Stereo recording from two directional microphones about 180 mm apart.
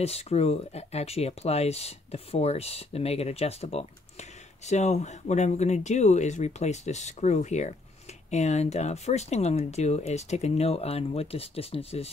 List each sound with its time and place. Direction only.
0.0 s speech: 35° left (ahead or behind)